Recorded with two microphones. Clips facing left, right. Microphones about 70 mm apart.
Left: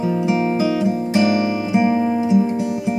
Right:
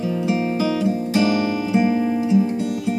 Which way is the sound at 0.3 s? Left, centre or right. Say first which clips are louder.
Left 2 dB; centre.